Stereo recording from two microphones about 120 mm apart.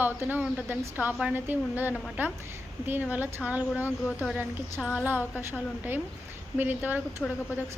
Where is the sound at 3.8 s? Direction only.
20° left (ahead or behind).